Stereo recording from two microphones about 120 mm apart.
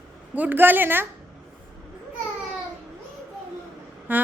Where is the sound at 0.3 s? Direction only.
15° right (ahead or behind).